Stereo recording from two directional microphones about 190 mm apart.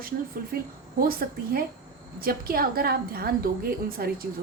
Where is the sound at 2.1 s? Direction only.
50° right (ahead or behind).